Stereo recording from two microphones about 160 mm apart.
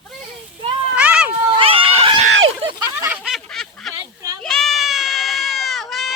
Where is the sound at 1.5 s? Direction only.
35° right (ahead or behind).